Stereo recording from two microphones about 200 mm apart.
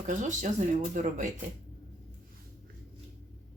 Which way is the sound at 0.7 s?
40° right (ahead or behind).